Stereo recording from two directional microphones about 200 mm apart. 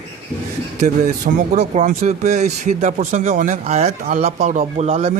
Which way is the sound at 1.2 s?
35° right (ahead or behind).